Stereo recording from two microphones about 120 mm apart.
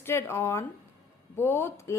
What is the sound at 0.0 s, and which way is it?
A woman's voice, 20° left (ahead or behind).